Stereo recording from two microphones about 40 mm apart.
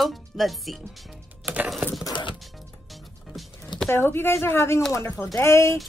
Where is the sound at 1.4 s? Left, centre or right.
Right.